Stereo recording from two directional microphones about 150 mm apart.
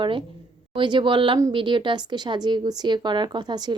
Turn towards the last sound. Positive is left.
turn(degrees=-30)  # may be behind; listen again after turning